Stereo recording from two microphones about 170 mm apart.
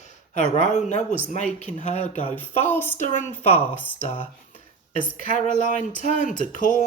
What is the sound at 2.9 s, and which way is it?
Speech, 45° left (ahead or behind).